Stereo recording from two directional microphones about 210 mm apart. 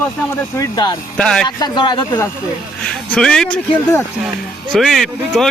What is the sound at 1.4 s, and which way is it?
Speech, 20° left (ahead or behind).